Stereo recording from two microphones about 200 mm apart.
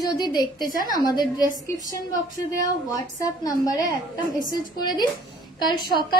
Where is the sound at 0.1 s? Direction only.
20° left (ahead or behind).